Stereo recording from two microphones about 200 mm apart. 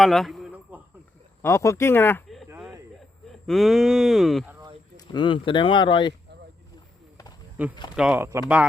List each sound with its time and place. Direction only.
0.0 s a sound: centre (ahead or behind)
1.4 s speech: 15° left (ahead or behind)
2.5 s a sound: 10° right (ahead or behind)
3.2 s speech: centre (ahead or behind)
4.9 s speech: 25° left (ahead or behind)
7.6 s speech: 5° right (ahead or behind)